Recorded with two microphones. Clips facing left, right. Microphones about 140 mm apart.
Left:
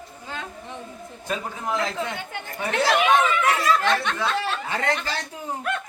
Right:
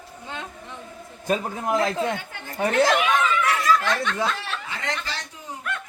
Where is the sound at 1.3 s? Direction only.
45° right (ahead or behind).